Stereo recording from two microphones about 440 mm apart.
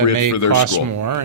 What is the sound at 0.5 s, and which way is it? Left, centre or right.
Speech, right.